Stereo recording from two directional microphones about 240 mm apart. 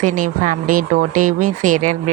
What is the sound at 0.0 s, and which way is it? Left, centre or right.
Speech, right.